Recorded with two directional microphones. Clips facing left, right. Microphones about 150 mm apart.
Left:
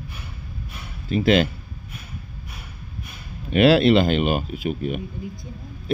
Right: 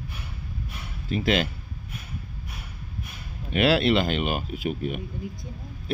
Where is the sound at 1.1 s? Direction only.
30° left (ahead or behind).